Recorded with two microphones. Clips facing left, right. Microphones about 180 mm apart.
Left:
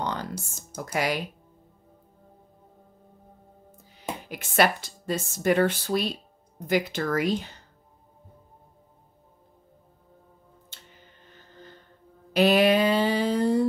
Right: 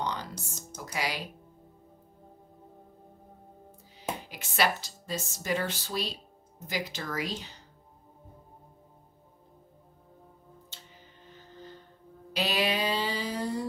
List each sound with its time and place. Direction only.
0.0 s music: 50° left (ahead or behind)
0.3 s music: 10° left (ahead or behind)
0.9 s speech: 50° left (ahead or behind)
4.3 s speech: 55° left (ahead or behind)
12.4 s a sound: 55° left (ahead or behind)